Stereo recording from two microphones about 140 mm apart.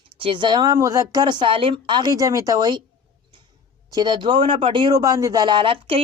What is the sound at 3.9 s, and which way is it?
Speech, 30° right (ahead or behind).